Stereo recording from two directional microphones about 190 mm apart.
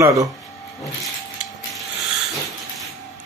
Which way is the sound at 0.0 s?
15° right (ahead or behind).